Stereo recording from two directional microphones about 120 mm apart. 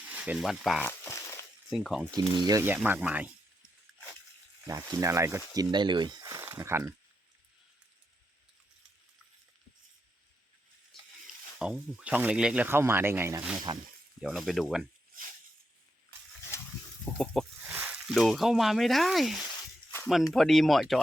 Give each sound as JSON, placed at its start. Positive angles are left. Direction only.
{"t": 0.1, "sound": "speech", "side_deg": -10}
{"t": 0.8, "sound": "a sound", "side_deg": 20}
{"t": 1.7, "sound": "speech", "side_deg": 0}
{"t": 2.6, "sound": "speech", "side_deg": -15}
{"t": 4.6, "sound": "speech", "side_deg": -30}
{"t": 5.5, "sound": "speech", "side_deg": -40}
{"t": 6.2, "sound": "a sound", "side_deg": -25}
{"t": 10.9, "sound": "a sound", "side_deg": 0}
{"t": 11.6, "sound": "speech", "side_deg": -10}
{"t": 12.6, "sound": "speech", "side_deg": -20}
{"t": 14.2, "sound": "speech", "side_deg": 0}
{"t": 17.1, "sound": "speech", "side_deg": 5}
{"t": 17.6, "sound": "speech", "side_deg": -10}